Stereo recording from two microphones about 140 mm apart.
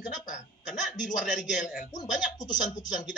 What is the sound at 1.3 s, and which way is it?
Speech, 65° left (ahead or behind).